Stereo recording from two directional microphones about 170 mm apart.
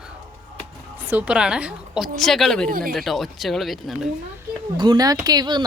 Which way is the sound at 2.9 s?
Centre (ahead or behind).